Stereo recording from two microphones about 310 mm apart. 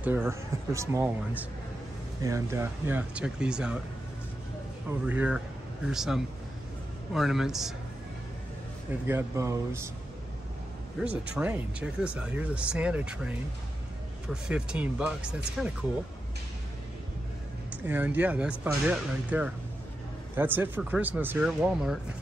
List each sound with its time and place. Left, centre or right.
0.0 s speech: centre
5.0 s speech: centre
9.0 s speech: centre
11.0 s speech: centre
17.8 s speech: centre